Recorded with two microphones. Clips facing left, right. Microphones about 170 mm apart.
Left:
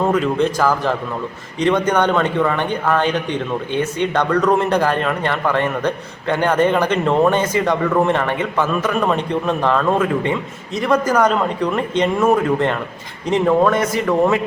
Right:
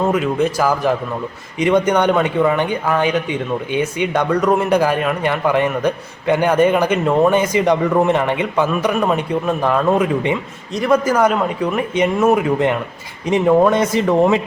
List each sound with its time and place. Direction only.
0.1 s a man's voice: 5° right (ahead or behind)